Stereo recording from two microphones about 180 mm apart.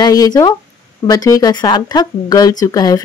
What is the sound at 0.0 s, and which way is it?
Speech, 20° left (ahead or behind).